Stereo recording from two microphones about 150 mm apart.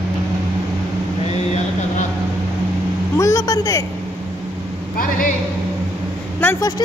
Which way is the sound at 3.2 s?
20° left (ahead or behind).